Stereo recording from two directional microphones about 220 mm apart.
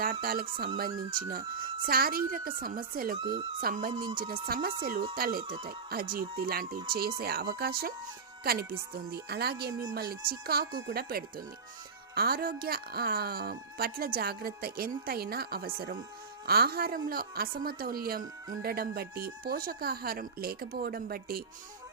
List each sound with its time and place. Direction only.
0.0 s speech: 40° right (ahead or behind)
3.2 s speech: 20° right (ahead or behind)
3.6 s a woman's voice: 40° right (ahead or behind)
3.9 s speech: 20° right (ahead or behind)
4.4 s a woman's voice: 40° right (ahead or behind)
10.7 s speech: 65° right (ahead or behind)
10.9 s a woman's voice: 40° right (ahead or behind)